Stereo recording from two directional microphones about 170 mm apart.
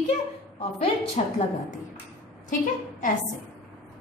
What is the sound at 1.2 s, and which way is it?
Speech, 40° left (ahead or behind).